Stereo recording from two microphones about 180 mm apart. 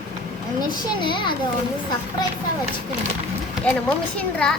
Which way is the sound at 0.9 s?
25° left (ahead or behind).